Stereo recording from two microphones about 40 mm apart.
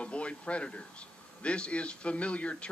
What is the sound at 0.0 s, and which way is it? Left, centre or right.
Speech, left.